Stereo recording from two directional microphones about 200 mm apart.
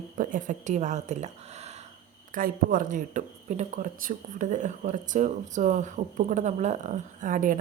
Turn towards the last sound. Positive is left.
turn(degrees=-40)  # may be behind; listen again after turning